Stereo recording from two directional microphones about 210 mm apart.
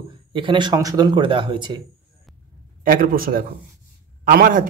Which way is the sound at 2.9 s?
45° right (ahead or behind).